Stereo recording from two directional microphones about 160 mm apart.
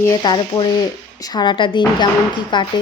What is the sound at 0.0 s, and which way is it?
Speech, 25° left (ahead or behind).